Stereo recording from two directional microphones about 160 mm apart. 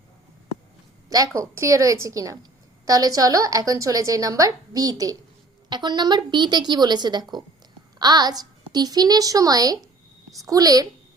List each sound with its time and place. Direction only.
1.1 s a woman's voice: 20° right (ahead or behind)